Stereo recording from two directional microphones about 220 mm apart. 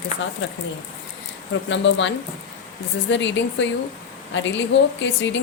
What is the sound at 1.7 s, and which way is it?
A woman's voice, 55° left (ahead or behind).